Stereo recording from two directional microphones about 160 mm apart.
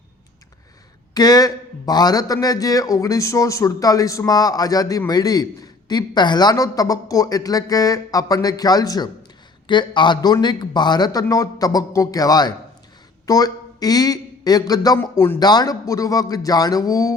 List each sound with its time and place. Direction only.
1.1 s a man's voice: 25° left (ahead or behind)